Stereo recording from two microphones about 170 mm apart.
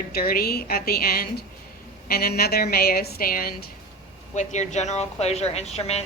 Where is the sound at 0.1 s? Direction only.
60° left (ahead or behind).